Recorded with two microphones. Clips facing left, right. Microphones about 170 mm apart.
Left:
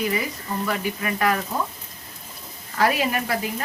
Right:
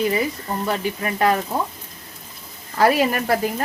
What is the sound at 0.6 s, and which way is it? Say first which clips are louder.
Speech: right 2 dB; 30° right (ahead or behind).